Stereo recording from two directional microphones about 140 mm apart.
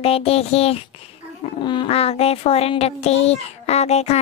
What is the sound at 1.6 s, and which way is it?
A child's voice, 35° left (ahead or behind).